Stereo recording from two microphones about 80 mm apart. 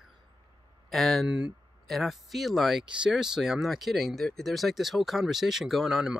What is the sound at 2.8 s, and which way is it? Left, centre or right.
Speech, centre.